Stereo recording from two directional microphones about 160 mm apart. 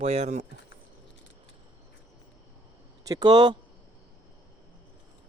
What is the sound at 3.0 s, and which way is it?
Speech, 25° right (ahead or behind).